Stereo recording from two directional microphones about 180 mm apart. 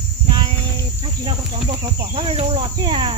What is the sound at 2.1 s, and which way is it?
Cricket, 30° right (ahead or behind).